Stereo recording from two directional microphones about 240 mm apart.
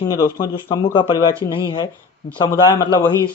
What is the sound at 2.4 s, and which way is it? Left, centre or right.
Speech, centre.